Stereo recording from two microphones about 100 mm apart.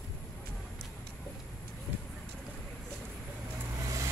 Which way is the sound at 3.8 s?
35° right (ahead or behind).